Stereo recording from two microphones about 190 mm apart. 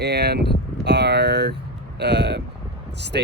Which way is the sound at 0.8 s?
60° right (ahead or behind).